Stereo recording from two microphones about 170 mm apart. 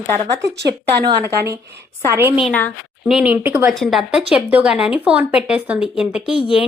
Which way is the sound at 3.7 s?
Centre (ahead or behind).